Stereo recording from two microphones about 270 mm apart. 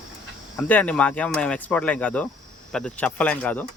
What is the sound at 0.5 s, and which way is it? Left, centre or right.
Speech, centre.